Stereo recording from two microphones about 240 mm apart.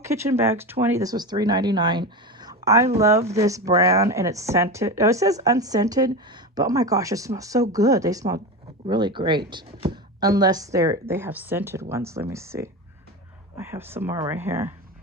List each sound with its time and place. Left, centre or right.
0.0 s speech: centre